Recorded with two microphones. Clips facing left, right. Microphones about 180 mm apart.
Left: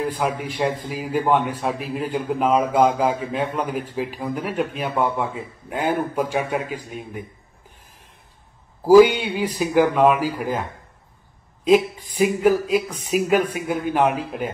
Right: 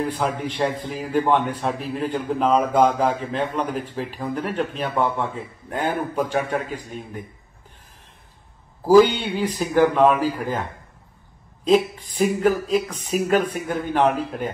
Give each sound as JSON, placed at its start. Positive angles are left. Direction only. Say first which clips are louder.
{"t": 0.2, "sound": "a man's voice", "louder": "even", "side_deg": 10}
{"t": 8.8, "sound": "a man's voice", "louder": "left 2 dB", "side_deg": 10}
{"t": 11.6, "sound": "a man's voice", "louder": "left 1 dB", "side_deg": 10}